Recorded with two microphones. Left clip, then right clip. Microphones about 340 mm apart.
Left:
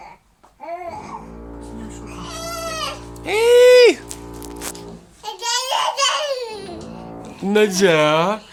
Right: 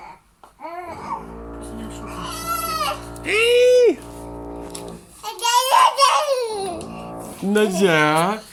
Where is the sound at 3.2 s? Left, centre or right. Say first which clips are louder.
Left 4 dB; centre.